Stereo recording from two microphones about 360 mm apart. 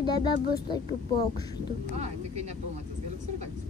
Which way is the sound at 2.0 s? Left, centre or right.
Right.